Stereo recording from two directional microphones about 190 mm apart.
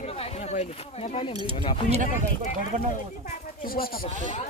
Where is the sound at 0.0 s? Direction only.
30° left (ahead or behind).